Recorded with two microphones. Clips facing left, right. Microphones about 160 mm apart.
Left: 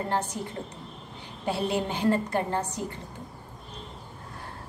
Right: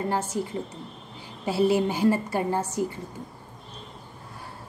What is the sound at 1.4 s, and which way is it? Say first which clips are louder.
A woman's voice: right 6 dB; 5° right (ahead or behind).